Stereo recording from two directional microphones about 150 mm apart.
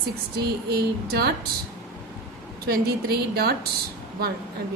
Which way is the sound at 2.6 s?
90° right.